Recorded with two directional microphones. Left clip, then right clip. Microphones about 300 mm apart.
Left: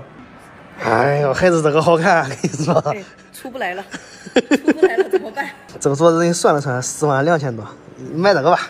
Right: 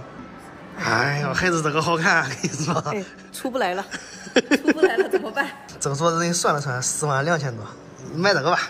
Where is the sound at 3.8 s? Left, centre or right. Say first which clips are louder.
Left 1 dB; centre.